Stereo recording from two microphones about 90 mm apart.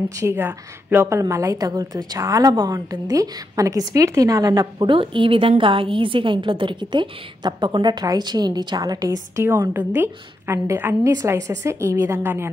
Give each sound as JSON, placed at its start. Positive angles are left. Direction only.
{"t": 0.2, "sound": "a woman's voice", "side_deg": -25}
{"t": 1.3, "sound": "a woman's voice", "side_deg": -40}
{"t": 4.9, "sound": "a woman's voice", "side_deg": -75}
{"t": 9.8, "sound": "a woman's voice", "side_deg": -25}